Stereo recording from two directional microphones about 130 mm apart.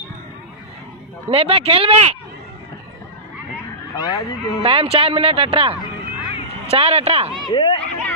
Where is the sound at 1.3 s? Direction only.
45° right (ahead or behind).